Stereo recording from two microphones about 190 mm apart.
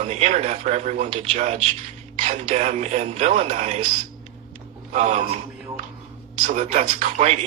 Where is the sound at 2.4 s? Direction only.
35° right (ahead or behind).